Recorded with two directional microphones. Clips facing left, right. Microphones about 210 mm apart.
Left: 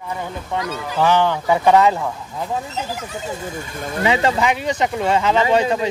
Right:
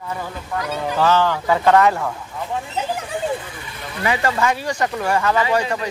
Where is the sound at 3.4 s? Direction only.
45° left (ahead or behind).